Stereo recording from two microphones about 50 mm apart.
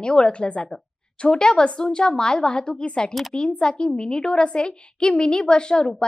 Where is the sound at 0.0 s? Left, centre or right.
Centre.